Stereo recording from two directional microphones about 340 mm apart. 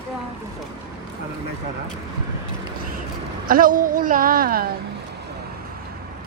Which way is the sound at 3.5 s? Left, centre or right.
Right.